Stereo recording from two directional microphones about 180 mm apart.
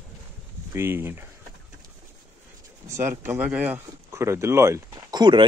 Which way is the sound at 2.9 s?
15° right (ahead or behind).